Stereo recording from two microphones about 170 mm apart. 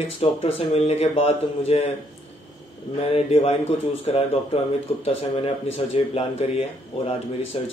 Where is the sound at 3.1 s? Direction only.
35° left (ahead or behind).